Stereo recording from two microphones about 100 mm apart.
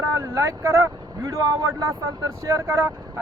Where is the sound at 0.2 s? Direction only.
30° right (ahead or behind).